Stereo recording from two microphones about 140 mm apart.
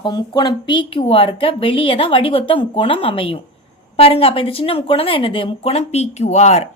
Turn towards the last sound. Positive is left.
turn(degrees=50)  # may be behind; listen again after turning